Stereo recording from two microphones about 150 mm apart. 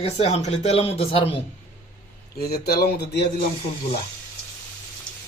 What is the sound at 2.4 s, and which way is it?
Speech, 90° left.